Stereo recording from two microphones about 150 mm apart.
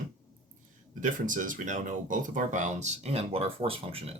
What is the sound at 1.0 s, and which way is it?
Speech, 60° right (ahead or behind).